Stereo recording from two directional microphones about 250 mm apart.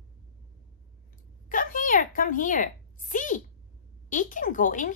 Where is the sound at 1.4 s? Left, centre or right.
Left.